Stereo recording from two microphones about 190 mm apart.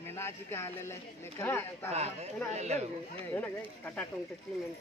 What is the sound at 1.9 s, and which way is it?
Speech, 35° right (ahead or behind).